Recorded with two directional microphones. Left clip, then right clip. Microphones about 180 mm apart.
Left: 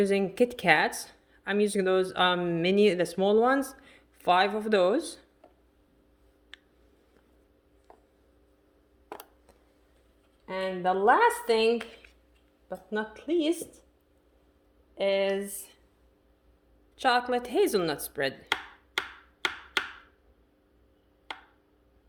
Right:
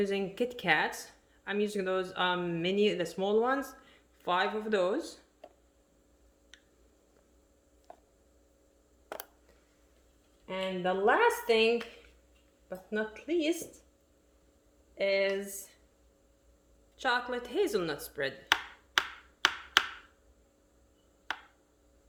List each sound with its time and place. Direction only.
0.0 s a woman's voice: 50° left (ahead or behind)
10.4 s a woman's voice: 35° left (ahead or behind)
14.9 s a woman's voice: 35° left (ahead or behind)
17.0 s a woman's voice: 50° left (ahead or behind)